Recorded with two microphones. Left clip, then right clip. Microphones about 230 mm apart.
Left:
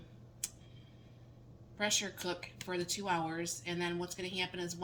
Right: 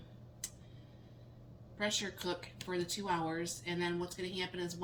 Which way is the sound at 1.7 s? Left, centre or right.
Left.